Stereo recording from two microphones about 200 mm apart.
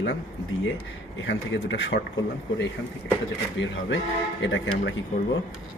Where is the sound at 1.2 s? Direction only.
65° left (ahead or behind).